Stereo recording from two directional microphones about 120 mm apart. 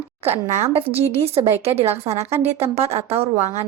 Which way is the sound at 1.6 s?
55° right (ahead or behind).